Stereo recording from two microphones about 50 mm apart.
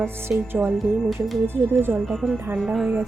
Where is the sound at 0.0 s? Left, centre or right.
Right.